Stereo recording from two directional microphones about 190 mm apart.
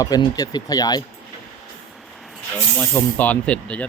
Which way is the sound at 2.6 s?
5° left (ahead or behind).